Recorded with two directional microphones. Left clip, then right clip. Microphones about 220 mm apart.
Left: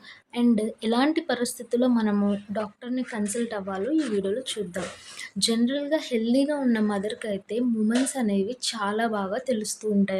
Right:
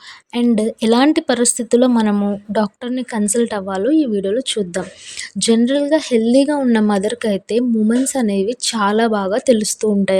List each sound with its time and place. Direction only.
0.3 s a woman's voice: 35° right (ahead or behind)